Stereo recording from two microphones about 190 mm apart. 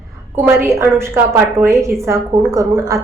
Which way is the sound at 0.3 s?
10° right (ahead or behind).